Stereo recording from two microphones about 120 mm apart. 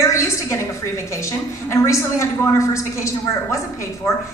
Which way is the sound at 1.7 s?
25° left (ahead or behind).